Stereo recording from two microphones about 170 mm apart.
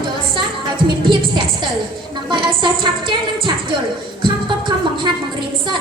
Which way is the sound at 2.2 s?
25° right (ahead or behind).